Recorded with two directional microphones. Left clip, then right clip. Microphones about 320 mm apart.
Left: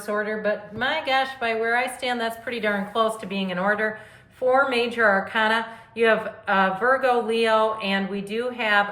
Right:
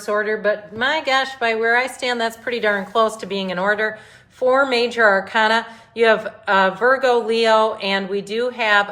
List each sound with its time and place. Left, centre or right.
0.0 s a woman's voice: right